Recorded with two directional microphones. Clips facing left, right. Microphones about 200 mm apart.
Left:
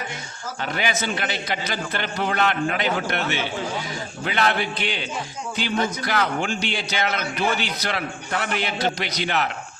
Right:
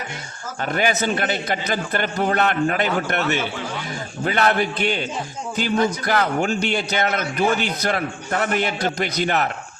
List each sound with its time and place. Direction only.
0.6 s a man's voice: 50° right (ahead or behind)